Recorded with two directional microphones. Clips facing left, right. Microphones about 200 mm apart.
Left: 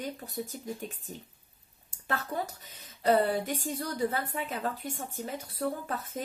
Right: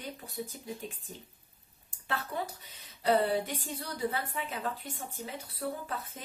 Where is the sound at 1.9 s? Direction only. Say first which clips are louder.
Left 3 dB; 40° left (ahead or behind).